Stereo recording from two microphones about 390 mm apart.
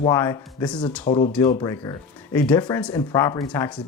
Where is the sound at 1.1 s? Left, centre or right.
Centre.